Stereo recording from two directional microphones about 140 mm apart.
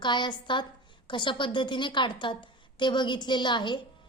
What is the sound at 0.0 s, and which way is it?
A woman's voice, 35° left (ahead or behind).